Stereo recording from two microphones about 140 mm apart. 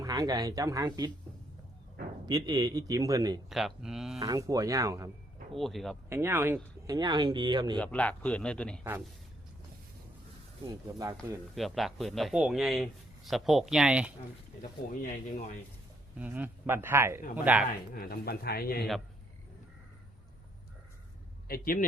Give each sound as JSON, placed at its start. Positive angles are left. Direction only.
{"t": 0.0, "sound": "speech", "side_deg": -25}
{"t": 2.2, "sound": "speech", "side_deg": -30}
{"t": 3.5, "sound": "a man's voice", "side_deg": -5}
{"t": 4.2, "sound": "speech", "side_deg": -25}
{"t": 5.5, "sound": "a man's voice", "side_deg": 0}
{"t": 6.1, "sound": "speech", "side_deg": -20}
{"t": 7.8, "sound": "a man's voice", "side_deg": 10}
{"t": 8.8, "sound": "speech", "side_deg": -10}
{"t": 10.7, "sound": "speech", "side_deg": -25}
{"t": 11.5, "sound": "a man's voice", "side_deg": 0}
{"t": 14.8, "sound": "speech", "side_deg": 80}
{"t": 16.1, "sound": "speech", "side_deg": -10}
{"t": 17.9, "sound": "speech", "side_deg": 90}
{"t": 21.4, "sound": "a man's voice", "side_deg": 90}